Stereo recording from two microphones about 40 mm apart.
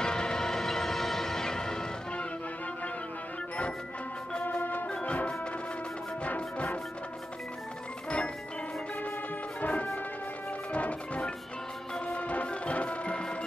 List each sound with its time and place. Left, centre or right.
0.0 s music: centre
4.3 s music: left
4.6 s music: left
4.8 s music: left
6.2 s music: left
9.6 s music: left